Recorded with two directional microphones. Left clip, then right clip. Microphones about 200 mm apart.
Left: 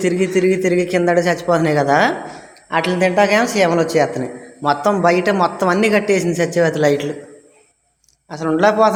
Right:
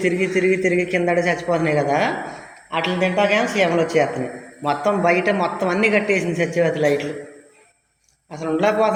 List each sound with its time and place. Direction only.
0.0 s a woman's voice: 25° left (ahead or behind)
8.3 s a woman's voice: 30° left (ahead or behind)